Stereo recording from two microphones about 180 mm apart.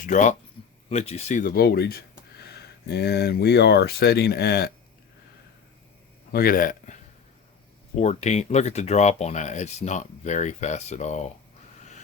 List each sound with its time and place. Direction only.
0.0 s speech: 45° left (ahead or behind); by 4.7 s 60° left (ahead or behind)
6.3 s speech: 55° left (ahead or behind)
11.8 s a sound: 40° left (ahead or behind)